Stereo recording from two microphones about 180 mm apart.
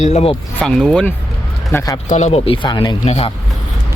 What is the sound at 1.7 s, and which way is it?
Speech, 15° left (ahead or behind).